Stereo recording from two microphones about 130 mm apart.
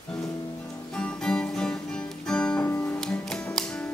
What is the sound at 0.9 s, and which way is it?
Music, 10° left (ahead or behind).